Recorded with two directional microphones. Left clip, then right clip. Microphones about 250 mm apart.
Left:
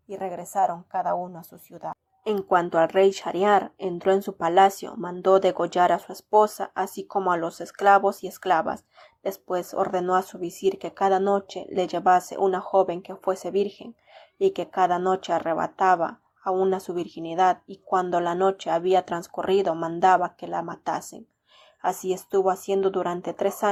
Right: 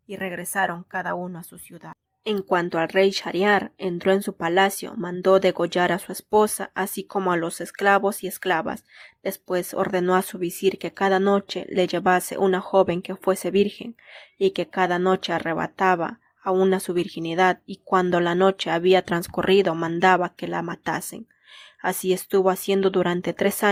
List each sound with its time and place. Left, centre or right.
0.1 s a woman's voice: right
1.4 s speech: right
1.9 s speech: right